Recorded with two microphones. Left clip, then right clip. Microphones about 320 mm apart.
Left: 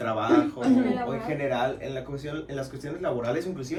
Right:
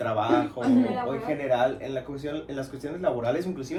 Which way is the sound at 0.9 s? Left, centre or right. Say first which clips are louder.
Right 1 dB; centre.